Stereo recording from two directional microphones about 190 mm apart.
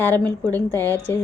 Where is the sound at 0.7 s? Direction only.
10° left (ahead or behind).